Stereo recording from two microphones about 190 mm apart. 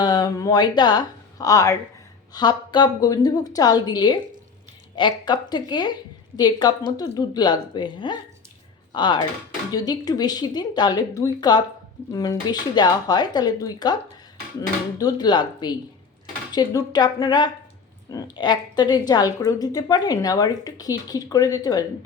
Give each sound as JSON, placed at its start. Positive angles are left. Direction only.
{"t": 0.0, "sound": "a woman's voice", "side_deg": 20}
{"t": 14.9, "sound": "a woman's voice", "side_deg": 20}